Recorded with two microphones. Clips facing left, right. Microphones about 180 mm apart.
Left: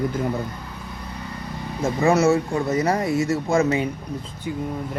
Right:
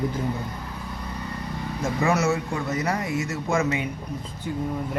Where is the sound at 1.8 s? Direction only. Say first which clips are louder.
Left 5 dB; 25° left (ahead or behind).